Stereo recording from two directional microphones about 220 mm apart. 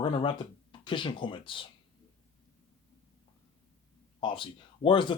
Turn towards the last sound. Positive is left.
turn(degrees=20)  # may be behind; listen again after turning